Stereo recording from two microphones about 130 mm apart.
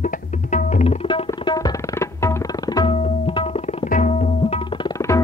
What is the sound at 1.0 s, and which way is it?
Tabla, 40° left (ahead or behind).